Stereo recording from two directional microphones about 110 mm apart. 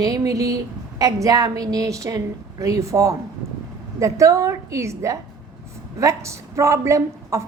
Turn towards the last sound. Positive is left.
turn(degrees=-25)  # may be behind; listen again after turning